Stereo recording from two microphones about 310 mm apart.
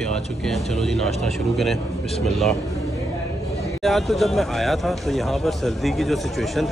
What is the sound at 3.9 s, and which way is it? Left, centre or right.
Speech, centre.